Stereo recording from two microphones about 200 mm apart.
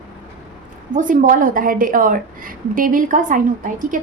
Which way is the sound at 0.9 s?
40° right (ahead or behind).